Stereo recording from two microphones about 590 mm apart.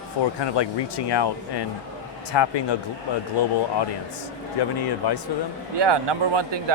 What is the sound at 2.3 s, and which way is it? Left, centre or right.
Speech, left.